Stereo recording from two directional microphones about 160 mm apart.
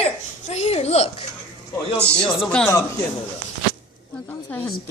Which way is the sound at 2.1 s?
5° left (ahead or behind).